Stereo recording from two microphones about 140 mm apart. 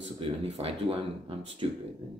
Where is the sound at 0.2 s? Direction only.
45° right (ahead or behind).